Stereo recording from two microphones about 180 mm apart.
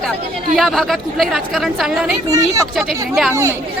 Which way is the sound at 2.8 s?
Centre (ahead or behind).